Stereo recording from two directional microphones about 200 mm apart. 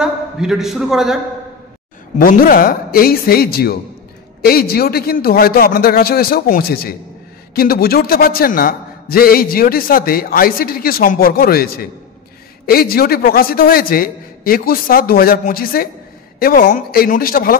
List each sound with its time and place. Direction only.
0.0 s a man's voice: 5° right (ahead or behind)
2.1 s a man's voice: 45° left (ahead or behind)